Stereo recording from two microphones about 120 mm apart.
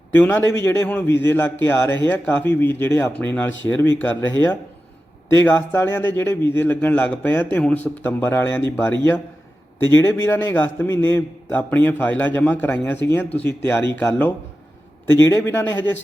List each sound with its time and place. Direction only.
0.1 s a man's voice: 15° left (ahead or behind)